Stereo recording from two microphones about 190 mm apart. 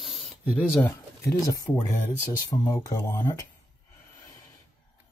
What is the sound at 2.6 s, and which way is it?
Speech, 15° left (ahead or behind).